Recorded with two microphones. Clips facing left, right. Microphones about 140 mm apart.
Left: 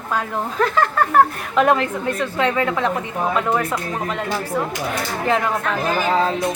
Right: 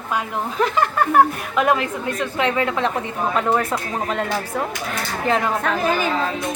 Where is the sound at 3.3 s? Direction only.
30° right (ahead or behind).